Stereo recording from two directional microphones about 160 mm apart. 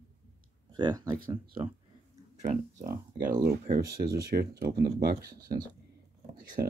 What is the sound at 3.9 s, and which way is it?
Speech, 20° right (ahead or behind).